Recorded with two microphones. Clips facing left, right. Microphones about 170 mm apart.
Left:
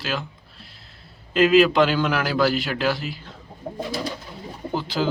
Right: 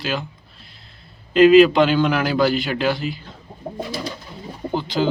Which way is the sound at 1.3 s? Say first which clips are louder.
Right 5 dB; centre (ahead or behind).